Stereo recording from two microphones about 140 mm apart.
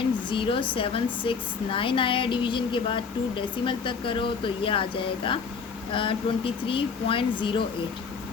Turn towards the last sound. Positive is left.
turn(degrees=35)  # may be behind; listen again after turning